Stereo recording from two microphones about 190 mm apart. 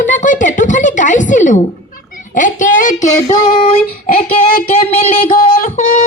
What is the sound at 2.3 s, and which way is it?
Female singing, 45° left (ahead or behind).